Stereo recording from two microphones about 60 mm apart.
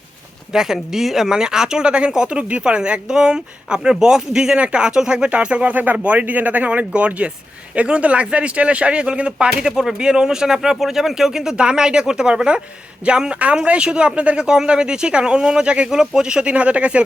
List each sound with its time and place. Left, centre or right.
0.5 s speech: centre